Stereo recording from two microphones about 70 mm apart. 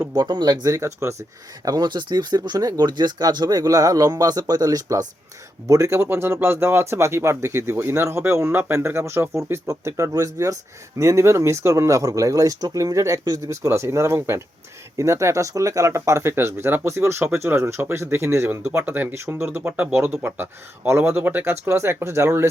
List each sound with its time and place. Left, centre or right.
0.1 s speech: right
1.6 s speech: right
5.6 s speech: right